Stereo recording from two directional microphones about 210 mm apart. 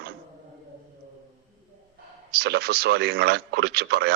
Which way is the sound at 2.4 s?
50° right (ahead or behind).